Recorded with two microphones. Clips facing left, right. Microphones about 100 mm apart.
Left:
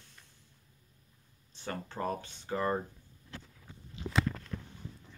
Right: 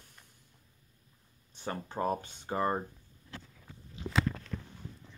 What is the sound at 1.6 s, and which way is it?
Speech, 20° right (ahead or behind).